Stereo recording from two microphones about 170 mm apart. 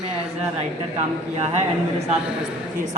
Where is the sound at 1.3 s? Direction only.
40° right (ahead or behind).